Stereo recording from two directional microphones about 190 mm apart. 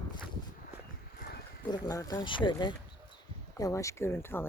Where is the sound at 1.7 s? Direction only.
20° left (ahead or behind).